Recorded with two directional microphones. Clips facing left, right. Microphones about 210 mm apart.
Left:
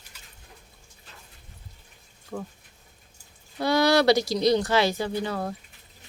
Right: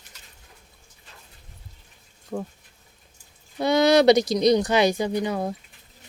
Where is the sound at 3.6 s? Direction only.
20° right (ahead or behind).